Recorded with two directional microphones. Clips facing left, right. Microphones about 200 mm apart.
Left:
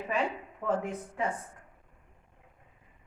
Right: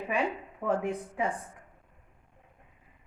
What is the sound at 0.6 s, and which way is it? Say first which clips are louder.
Speech: right 2 dB; 15° right (ahead or behind).